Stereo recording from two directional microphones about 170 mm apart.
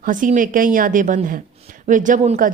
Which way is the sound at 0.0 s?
50° right (ahead or behind).